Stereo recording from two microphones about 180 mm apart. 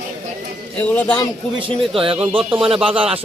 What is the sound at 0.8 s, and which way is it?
Speech, 10° left (ahead or behind).